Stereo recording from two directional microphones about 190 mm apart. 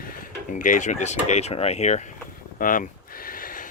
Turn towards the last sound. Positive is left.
turn(degrees=45)  # may be behind; listen again after turning